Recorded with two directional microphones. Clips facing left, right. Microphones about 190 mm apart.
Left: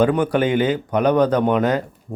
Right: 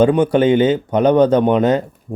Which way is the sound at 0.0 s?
25° right (ahead or behind).